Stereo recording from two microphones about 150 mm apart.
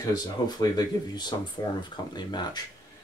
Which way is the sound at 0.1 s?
25° left (ahead or behind).